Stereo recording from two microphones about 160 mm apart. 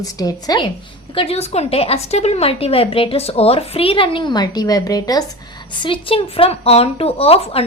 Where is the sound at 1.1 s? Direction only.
35° left (ahead or behind).